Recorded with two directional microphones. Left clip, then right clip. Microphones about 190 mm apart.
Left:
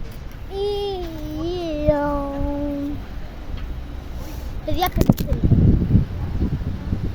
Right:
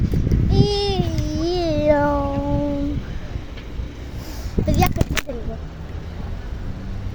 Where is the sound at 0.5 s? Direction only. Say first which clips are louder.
Right 2 dB; 50° right (ahead or behind).